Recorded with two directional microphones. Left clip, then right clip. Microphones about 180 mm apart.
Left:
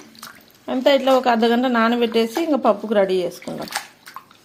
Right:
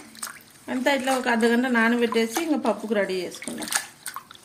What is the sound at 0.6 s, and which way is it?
Speech, 45° left (ahead or behind).